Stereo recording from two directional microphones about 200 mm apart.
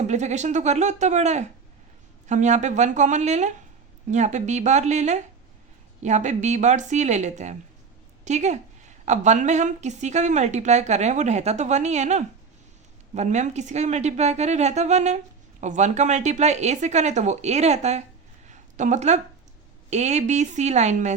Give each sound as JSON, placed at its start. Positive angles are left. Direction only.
{"t": 0.1, "sound": "a woman's voice", "side_deg": -35}
{"t": 18.4, "sound": "a sound", "side_deg": -35}
{"t": 19.9, "sound": "a woman's voice", "side_deg": -35}